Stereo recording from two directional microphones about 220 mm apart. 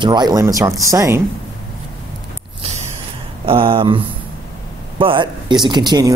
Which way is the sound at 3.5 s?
25° right (ahead or behind).